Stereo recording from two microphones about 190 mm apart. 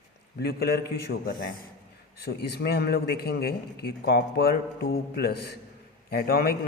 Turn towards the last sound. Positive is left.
turn(degrees=55)  # may be behind; listen again after turning